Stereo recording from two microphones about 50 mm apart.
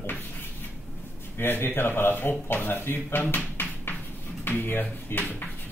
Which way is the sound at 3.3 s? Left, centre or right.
Left.